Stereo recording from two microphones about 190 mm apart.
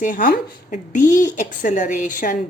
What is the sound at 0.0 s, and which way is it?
A woman's voice, 45° left (ahead or behind).